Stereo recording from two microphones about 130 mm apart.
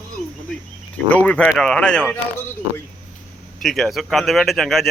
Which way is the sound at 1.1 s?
10° left (ahead or behind).